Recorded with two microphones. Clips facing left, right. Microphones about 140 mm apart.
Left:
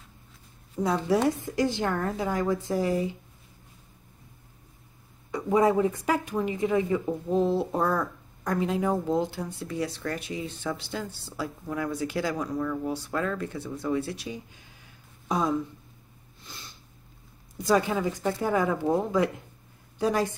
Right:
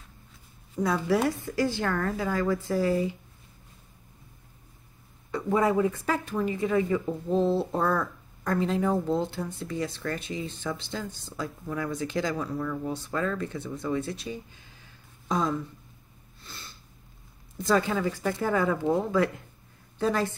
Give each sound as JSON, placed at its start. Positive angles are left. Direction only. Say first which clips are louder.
{"t": 0.7, "sound": "speech", "louder": "left 1 dB", "side_deg": 15}
{"t": 5.3, "sound": "speech", "louder": "left 2 dB", "side_deg": 15}
{"t": 15.2, "sound": "speech", "louder": "left 1 dB", "side_deg": 10}
{"t": 17.6, "sound": "speech", "louder": "left 1 dB", "side_deg": 15}